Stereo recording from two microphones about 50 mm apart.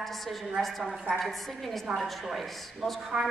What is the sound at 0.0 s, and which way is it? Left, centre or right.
A woman's voice, centre.